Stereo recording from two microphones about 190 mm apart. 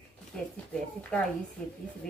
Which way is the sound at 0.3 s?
5° left (ahead or behind).